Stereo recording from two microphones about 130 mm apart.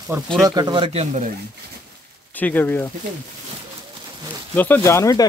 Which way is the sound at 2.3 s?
15° left (ahead or behind).